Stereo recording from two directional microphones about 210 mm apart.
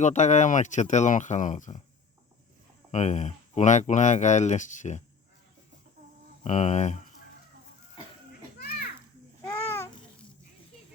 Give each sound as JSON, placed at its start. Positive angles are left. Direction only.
{"t": 0.0, "sound": "speech", "side_deg": 35}
{"t": 2.9, "sound": "speech", "side_deg": 35}
{"t": 6.4, "sound": "speech", "side_deg": 35}
{"t": 8.3, "sound": "children playing", "side_deg": 45}
{"t": 9.4, "sound": "babbling", "side_deg": 10}